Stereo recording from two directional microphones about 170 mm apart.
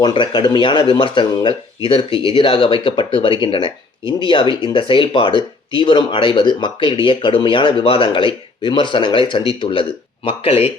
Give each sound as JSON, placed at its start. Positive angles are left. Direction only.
{"t": 0.0, "sound": "speech", "side_deg": 25}